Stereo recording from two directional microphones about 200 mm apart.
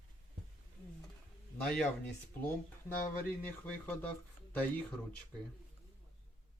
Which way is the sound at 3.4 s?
10° left (ahead or behind).